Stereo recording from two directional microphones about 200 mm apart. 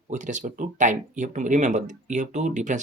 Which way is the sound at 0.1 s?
40° right (ahead or behind).